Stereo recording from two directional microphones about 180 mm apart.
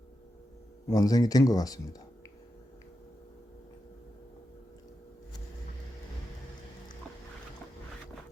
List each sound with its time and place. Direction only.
0.9 s speech: 20° left (ahead or behind)